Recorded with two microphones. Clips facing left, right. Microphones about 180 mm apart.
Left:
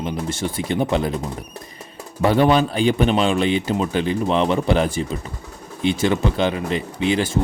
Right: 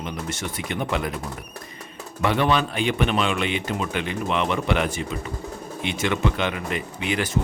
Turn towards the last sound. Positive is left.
turn(degrees=30)  # may be behind; listen again after turning